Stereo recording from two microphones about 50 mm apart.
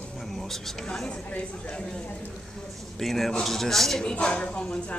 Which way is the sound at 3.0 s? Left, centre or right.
Centre.